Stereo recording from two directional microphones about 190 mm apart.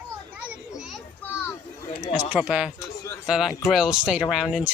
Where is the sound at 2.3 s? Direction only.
5° right (ahead or behind).